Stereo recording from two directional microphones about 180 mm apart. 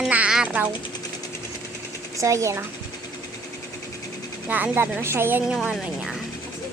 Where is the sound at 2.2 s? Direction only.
15° right (ahead or behind).